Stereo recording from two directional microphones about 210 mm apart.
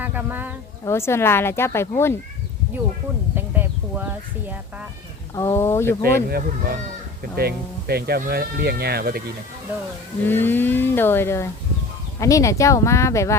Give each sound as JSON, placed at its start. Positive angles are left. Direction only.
{"t": 0.0, "sound": "speech", "side_deg": -10}
{"t": 0.9, "sound": "a woman's voice", "side_deg": 10}
{"t": 3.3, "sound": "a sound", "side_deg": -10}
{"t": 5.3, "sound": "a woman's voice", "side_deg": 15}
{"t": 6.2, "sound": "speech", "side_deg": -45}
{"t": 10.2, "sound": "a woman's voice", "side_deg": 10}